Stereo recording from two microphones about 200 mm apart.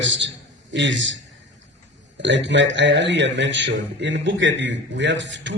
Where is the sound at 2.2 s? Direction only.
60° right (ahead or behind).